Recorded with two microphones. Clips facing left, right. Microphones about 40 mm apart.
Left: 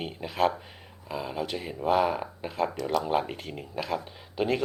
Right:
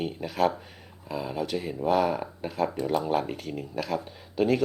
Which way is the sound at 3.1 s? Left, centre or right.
Left.